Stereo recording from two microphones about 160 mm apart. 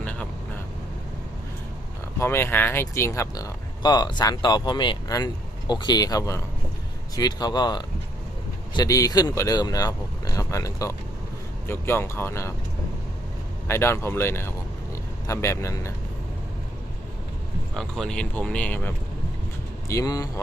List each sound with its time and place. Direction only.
0.0 s vehicle: 10° left (ahead or behind)
2.1 s speech: 15° left (ahead or behind)
13.7 s speech: 15° left (ahead or behind)
17.7 s speech: centre (ahead or behind)
19.9 s speech: 20° left (ahead or behind)